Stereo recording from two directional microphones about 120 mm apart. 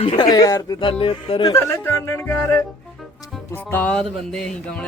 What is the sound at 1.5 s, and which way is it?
Speech, 20° left (ahead or behind).